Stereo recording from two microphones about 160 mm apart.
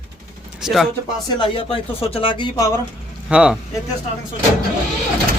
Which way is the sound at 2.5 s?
20° left (ahead or behind).